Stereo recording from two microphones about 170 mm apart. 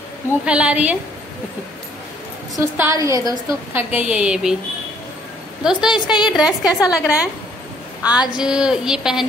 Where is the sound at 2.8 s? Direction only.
15° right (ahead or behind).